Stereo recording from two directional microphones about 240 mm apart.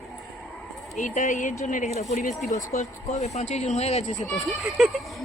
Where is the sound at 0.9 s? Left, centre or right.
Left.